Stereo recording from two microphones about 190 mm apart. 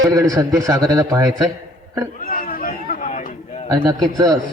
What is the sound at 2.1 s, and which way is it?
Chatter, 45° left (ahead or behind).